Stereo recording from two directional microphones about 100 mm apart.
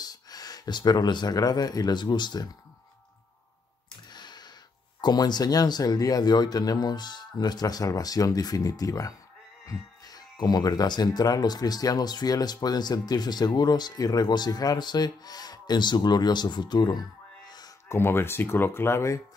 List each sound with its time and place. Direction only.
0.0 s speech: 40° left (ahead or behind)
4.1 s a sound: 45° left (ahead or behind)
5.0 s speech: 45° left (ahead or behind)
17.8 s speech: 25° left (ahead or behind)